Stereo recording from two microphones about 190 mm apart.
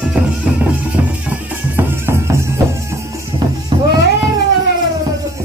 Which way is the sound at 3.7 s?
20° right (ahead or behind).